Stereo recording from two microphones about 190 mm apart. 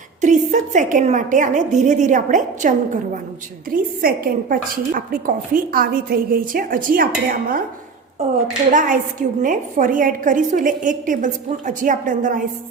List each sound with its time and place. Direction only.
0.2 s a woman's voice: 40° right (ahead or behind)
8.7 s a woman's voice: 45° right (ahead or behind)